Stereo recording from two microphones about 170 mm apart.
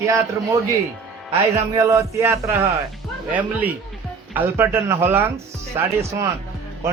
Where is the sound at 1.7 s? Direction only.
15° right (ahead or behind).